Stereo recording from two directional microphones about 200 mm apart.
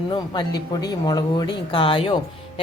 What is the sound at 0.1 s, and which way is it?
Speech, 20° left (ahead or behind).